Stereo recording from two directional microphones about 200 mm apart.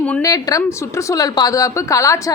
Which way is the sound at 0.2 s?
15° left (ahead or behind).